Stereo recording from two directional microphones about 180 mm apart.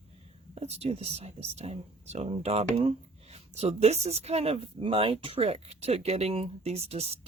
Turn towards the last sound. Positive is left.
turn(degrees=-35)  # may be behind; listen again after turning